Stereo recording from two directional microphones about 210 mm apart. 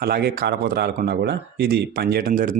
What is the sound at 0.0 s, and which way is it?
Speech, 45° right (ahead or behind).